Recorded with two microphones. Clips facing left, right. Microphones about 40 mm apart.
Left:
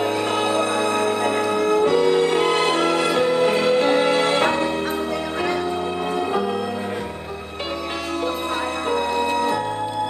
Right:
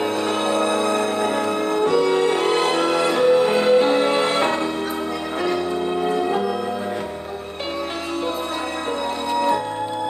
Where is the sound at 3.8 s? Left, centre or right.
Left.